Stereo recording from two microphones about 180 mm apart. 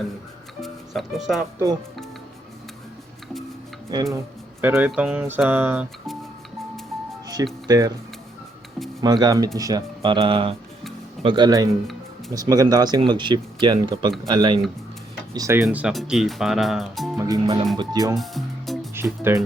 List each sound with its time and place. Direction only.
0.6 s speech: centre (ahead or behind)
3.9 s speech: 20° right (ahead or behind)
4.6 s a sound: 10° right (ahead or behind)
7.7 s speech: 20° right (ahead or behind)
9.0 s speech: 20° right (ahead or behind)
15.3 s a sound: 20° right (ahead or behind)
15.6 s speech: 5° right (ahead or behind)
17.2 s speech: 20° right (ahead or behind)
17.4 s speech: 30° right (ahead or behind)
17.7 s speech: 20° right (ahead or behind)
18.1 s music: centre (ahead or behind)
18.9 s speech: 15° right (ahead or behind)